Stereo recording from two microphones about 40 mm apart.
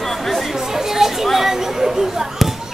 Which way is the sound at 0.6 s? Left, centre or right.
Centre.